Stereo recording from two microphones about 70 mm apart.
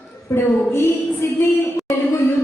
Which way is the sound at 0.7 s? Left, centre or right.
Left.